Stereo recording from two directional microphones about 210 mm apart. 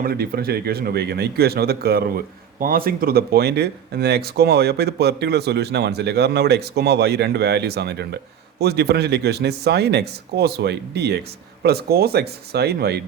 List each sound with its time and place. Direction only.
0.0 s a man's voice: 45° right (ahead or behind)